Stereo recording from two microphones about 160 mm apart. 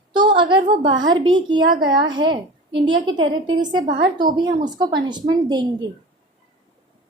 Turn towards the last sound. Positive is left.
turn(degrees=-30)  # may be behind; listen again after turning